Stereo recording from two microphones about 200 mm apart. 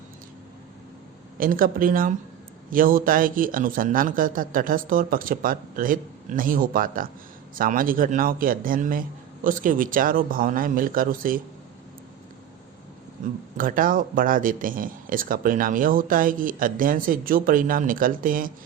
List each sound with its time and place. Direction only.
1.4 s speech: 45° right (ahead or behind)
13.6 s speech: 45° right (ahead or behind)